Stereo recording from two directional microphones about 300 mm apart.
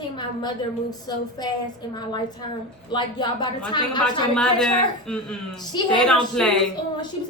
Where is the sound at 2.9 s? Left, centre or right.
Centre.